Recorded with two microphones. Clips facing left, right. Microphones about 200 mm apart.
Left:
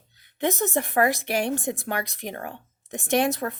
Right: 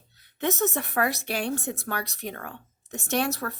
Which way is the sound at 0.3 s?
15° left (ahead or behind).